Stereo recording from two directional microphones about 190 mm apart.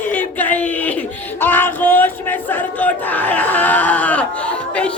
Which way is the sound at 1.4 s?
10° left (ahead or behind).